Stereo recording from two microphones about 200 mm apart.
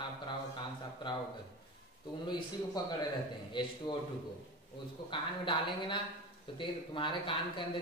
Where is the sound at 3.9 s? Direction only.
20° left (ahead or behind).